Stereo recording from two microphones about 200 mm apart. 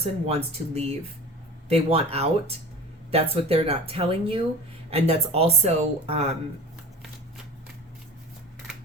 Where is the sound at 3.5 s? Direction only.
30° right (ahead or behind).